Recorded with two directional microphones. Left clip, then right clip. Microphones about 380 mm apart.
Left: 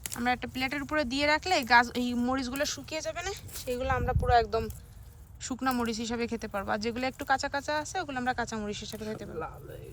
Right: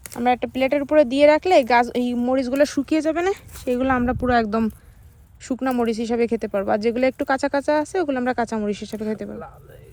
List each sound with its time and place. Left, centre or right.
0.1 s speech: centre
5.5 s speech: centre